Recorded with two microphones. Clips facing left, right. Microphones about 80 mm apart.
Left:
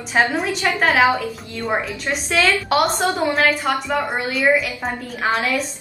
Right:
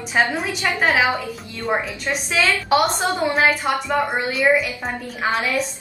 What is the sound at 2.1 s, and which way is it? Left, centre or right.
A woman's voice, centre.